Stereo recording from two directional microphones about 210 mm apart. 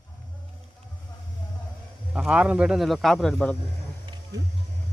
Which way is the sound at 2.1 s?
5° right (ahead or behind).